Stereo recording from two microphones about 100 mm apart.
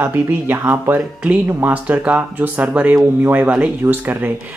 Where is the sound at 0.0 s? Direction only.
20° right (ahead or behind).